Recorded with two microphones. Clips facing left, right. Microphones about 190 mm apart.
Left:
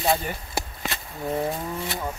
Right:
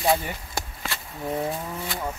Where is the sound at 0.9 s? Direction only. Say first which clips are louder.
Left 1 dB; 20° left (ahead or behind).